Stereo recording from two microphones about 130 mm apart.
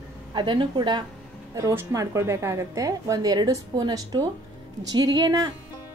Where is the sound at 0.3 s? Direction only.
35° right (ahead or behind).